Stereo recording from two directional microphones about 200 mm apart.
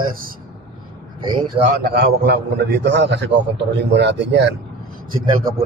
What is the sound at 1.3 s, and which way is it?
Speech, 25° right (ahead or behind).